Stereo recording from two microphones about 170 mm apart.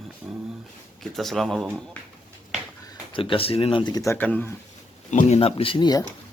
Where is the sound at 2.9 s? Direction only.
30° left (ahead or behind); by 4.5 s 10° left (ahead or behind).